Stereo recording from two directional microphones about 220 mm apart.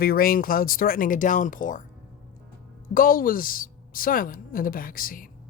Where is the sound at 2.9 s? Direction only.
40° left (ahead or behind).